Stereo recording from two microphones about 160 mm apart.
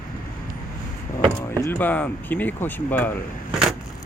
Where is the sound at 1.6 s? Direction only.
10° left (ahead or behind).